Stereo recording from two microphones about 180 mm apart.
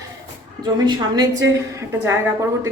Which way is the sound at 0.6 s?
25° right (ahead or behind).